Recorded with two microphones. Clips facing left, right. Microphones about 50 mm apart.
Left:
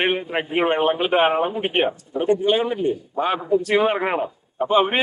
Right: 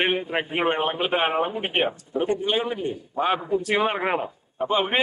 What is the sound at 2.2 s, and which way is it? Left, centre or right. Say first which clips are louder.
A man's voice: left 5 dB; centre.